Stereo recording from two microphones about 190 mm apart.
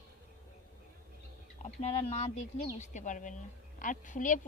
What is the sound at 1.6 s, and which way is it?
Speech, 35° left (ahead or behind).